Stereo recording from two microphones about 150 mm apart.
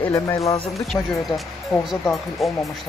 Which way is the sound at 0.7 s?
Centre (ahead or behind).